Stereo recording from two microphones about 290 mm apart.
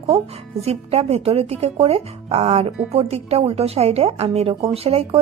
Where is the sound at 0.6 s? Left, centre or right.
Right.